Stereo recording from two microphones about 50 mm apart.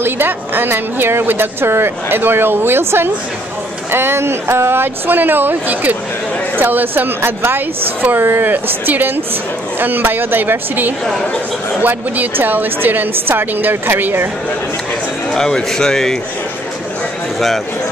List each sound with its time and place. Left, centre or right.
0.0 s a woman's voice: right
7.2 s a woman's voice: right
15.3 s speech: centre